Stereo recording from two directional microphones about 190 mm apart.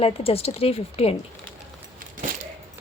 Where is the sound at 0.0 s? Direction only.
30° left (ahead or behind).